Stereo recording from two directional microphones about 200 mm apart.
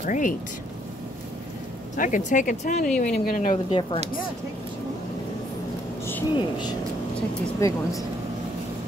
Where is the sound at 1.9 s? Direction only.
40° left (ahead or behind).